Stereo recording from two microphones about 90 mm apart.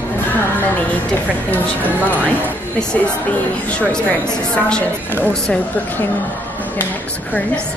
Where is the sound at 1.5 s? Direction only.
20° left (ahead or behind).